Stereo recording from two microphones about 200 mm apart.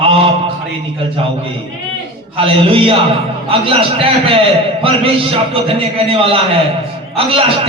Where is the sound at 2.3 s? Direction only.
30° right (ahead or behind).